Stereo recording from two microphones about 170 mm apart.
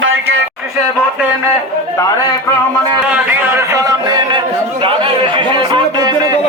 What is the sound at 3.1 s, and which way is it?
Speech, 10° right (ahead or behind).